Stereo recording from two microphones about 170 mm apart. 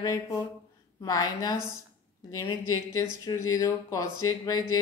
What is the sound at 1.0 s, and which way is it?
A woman's voice, 20° left (ahead or behind).